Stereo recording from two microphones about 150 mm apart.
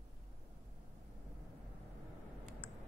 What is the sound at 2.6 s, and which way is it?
Typing, 35° left (ahead or behind).